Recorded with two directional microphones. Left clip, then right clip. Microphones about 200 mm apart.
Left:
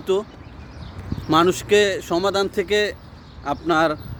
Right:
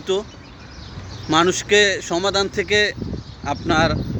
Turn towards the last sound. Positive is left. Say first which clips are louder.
# even
turn(degrees=15)  # may be behind; listen again after turning